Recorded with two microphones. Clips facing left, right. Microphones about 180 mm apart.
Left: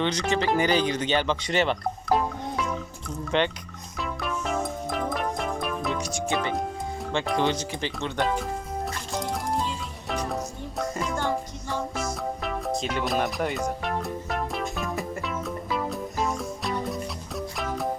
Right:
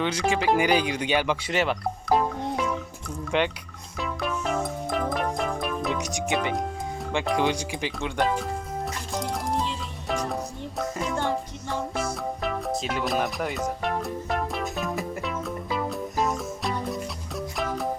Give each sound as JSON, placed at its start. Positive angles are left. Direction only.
{"t": 0.0, "sound": "speech", "side_deg": -5}
{"t": 3.9, "sound": "music", "side_deg": 0}
{"t": 6.0, "sound": "speech", "side_deg": -15}
{"t": 9.1, "sound": "music", "side_deg": 0}